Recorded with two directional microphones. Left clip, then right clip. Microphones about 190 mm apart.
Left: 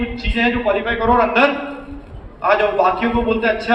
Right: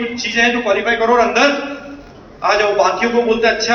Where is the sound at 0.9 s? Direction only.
45° left (ahead or behind).